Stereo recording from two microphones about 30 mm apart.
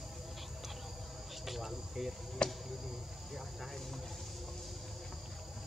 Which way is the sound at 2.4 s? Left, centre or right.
Left.